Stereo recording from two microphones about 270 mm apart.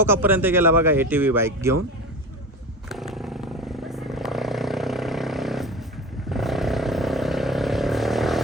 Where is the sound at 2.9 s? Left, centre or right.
Centre.